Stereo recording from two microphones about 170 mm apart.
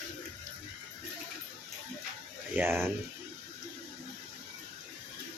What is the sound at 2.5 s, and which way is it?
Speech, 15° right (ahead or behind).